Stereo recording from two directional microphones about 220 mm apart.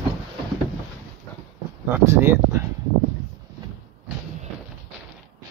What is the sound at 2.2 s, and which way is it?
Speech, 10° right (ahead or behind).